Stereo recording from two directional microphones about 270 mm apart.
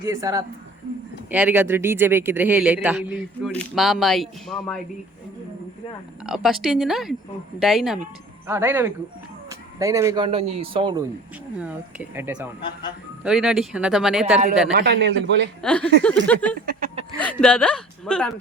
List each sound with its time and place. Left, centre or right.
0.0 s a man's voice: centre
6.2 s a man's voice: centre
12.1 s a man's voice: centre
14.7 s a man's voice: right
15.6 s a man's voice: centre
16.6 s a sound: right
17.2 s a man's voice: centre